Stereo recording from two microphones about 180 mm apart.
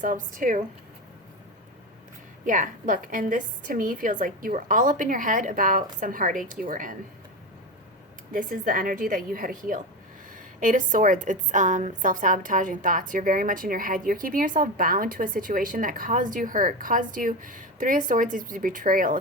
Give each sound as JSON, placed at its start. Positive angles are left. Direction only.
{"t": 0.0, "sound": "a woman's voice", "side_deg": -45}
{"t": 2.5, "sound": "a woman's voice", "side_deg": -45}
{"t": 8.3, "sound": "a woman's voice", "side_deg": -50}